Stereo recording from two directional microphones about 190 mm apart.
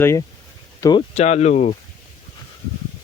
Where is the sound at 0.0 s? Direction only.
15° left (ahead or behind).